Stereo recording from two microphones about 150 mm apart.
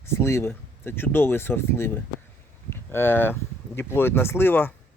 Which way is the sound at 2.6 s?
15° left (ahead or behind).